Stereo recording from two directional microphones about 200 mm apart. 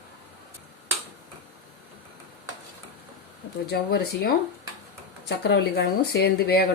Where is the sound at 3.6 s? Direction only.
55° left (ahead or behind).